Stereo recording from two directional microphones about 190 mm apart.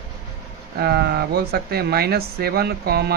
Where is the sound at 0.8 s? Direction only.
60° right (ahead or behind).